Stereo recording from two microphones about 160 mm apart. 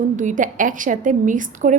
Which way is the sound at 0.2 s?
55° right (ahead or behind).